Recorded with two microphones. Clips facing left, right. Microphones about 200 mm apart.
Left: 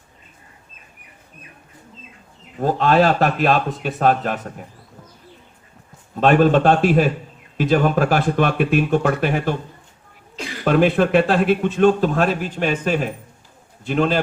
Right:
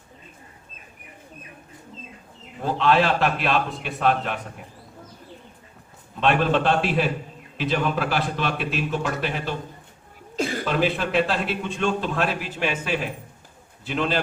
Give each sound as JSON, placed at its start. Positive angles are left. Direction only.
{"t": 2.6, "sound": "a man's voice", "side_deg": 45}
{"t": 6.1, "sound": "a man's voice", "side_deg": 45}
{"t": 10.4, "sound": "chuckle", "side_deg": -45}
{"t": 10.7, "sound": "a man's voice", "side_deg": 55}